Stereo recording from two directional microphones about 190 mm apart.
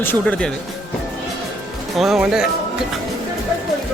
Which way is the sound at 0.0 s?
10° left (ahead or behind).